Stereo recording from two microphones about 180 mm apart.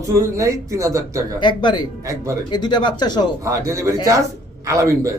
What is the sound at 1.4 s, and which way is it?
Speech, 25° left (ahead or behind).